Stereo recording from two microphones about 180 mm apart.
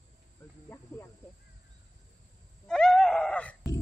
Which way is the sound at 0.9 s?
5° left (ahead or behind).